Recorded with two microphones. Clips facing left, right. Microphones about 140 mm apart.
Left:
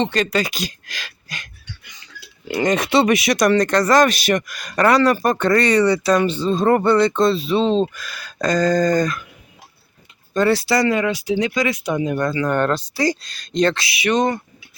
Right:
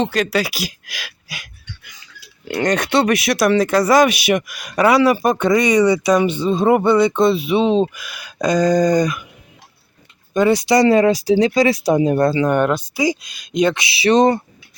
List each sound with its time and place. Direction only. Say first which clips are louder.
0.0 s speech: right 1 dB; centre (ahead or behind)
10.3 s speech: right 3 dB; 15° right (ahead or behind); by 12.5 s 30° right (ahead or behind)
12.5 s speech: right 3 dB; 15° right (ahead or behind)
13.8 s speech: right 5 dB; 30° right (ahead or behind)